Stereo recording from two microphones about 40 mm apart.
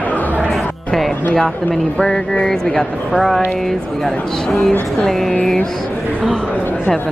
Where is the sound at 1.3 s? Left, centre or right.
Left.